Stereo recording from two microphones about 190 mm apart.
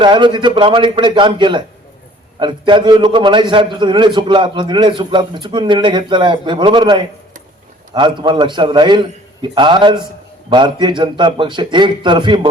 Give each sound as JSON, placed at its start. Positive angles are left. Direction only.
{"t": 0.0, "sound": "a man's voice", "side_deg": -25}